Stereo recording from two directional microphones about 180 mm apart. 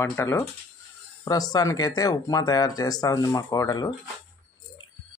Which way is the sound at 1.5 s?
20° left (ahead or behind).